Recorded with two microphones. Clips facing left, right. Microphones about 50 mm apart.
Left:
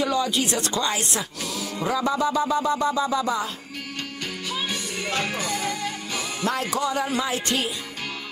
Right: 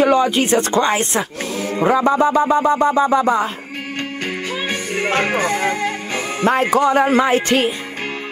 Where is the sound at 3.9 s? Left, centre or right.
Right.